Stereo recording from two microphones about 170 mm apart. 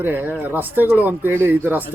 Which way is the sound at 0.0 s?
10° right (ahead or behind).